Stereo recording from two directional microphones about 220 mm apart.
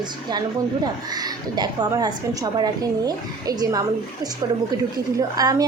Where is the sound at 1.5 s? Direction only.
20° right (ahead or behind).